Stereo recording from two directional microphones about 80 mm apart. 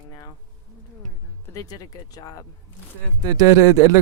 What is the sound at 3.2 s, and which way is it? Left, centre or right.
Speech, right.